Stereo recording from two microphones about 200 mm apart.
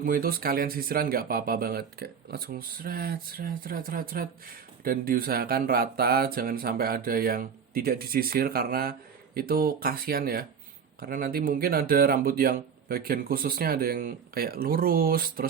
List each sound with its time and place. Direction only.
0.0 s speech: 45° right (ahead or behind)